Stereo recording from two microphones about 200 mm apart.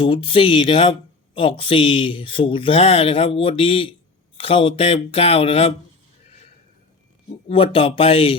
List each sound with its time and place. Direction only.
0.0 s speech: 25° left (ahead or behind)
7.4 s speech: 25° left (ahead or behind)